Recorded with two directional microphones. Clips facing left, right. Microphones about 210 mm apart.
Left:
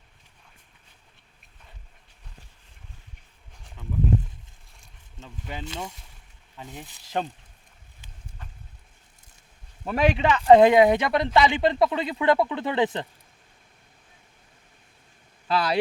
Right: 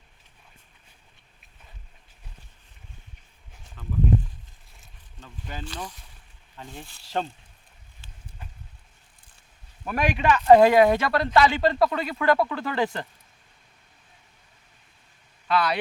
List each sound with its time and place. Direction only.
5.2 s speech: 20° left (ahead or behind)
9.8 s speech: 25° left (ahead or behind)
15.4 s speech: 30° left (ahead or behind)